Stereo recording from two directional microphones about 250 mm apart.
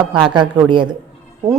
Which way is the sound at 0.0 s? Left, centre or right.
Centre.